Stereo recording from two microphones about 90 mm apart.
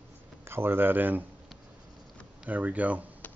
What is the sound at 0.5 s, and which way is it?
Speech, 25° right (ahead or behind).